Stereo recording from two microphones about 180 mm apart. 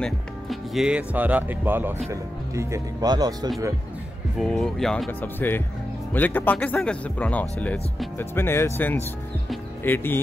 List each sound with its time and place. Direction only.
0.0 s speech: centre (ahead or behind); by 3.3 s 20° right (ahead or behind)
4.4 s speech: 5° left (ahead or behind)